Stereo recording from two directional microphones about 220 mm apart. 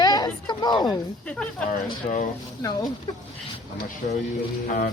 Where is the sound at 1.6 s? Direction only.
35° left (ahead or behind).